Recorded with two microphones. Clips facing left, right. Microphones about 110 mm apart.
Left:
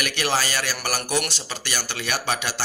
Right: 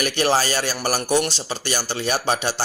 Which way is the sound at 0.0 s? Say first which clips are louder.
Right 5 dB; 35° right (ahead or behind).